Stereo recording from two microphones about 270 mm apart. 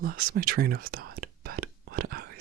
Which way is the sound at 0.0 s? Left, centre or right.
Right.